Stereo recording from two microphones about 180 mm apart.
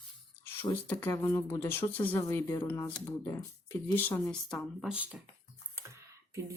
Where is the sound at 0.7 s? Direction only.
10° left (ahead or behind); by 5.2 s 5° right (ahead or behind).